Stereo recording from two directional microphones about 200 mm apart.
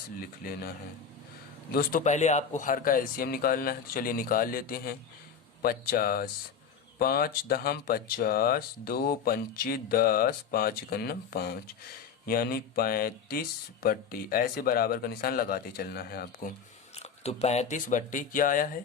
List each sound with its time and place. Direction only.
0.4 s speech: 45° left (ahead or behind)
1.7 s speech: 45° left (ahead or behind)
16.9 s speech: 30° left (ahead or behind)